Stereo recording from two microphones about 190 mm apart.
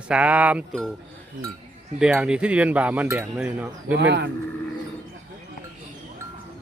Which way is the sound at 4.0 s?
65° right (ahead or behind).